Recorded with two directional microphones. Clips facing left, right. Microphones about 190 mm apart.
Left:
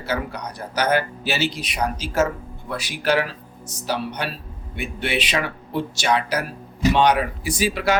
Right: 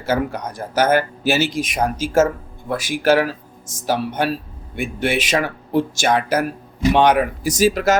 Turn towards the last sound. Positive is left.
turn(degrees=-45)  # may be behind; listen again after turning